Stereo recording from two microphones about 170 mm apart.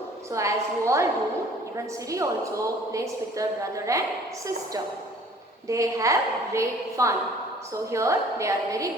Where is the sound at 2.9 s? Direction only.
20° right (ahead or behind).